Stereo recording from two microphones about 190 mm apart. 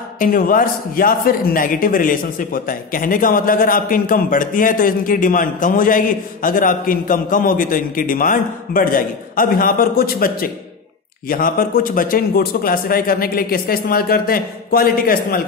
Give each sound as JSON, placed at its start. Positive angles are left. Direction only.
{"t": 0.2, "sound": "a man's voice", "side_deg": 45}